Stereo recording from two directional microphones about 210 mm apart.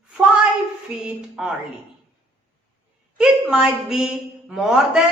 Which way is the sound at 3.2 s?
5° right (ahead or behind).